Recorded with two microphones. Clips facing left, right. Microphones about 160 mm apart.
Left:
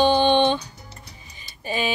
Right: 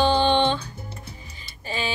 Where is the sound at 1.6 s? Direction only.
15° left (ahead or behind).